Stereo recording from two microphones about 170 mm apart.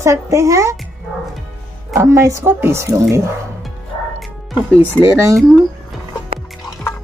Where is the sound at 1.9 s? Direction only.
15° right (ahead or behind).